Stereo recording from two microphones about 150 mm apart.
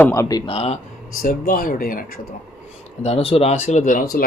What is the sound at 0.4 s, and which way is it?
Speech, 45° left (ahead or behind).